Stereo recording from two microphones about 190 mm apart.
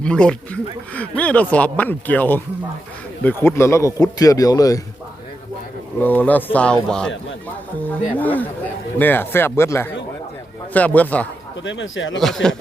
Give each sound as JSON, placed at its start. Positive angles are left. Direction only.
{"t": 0.0, "sound": "speech", "side_deg": 5}
{"t": 6.0, "sound": "speech", "side_deg": 10}
{"t": 11.6, "sound": "speech", "side_deg": 75}
{"t": 12.2, "sound": "speech", "side_deg": 5}